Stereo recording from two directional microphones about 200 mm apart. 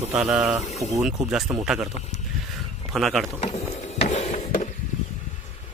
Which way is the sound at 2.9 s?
Centre (ahead or behind).